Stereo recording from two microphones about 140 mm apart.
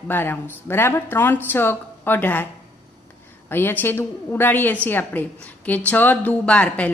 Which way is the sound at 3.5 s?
15° left (ahead or behind).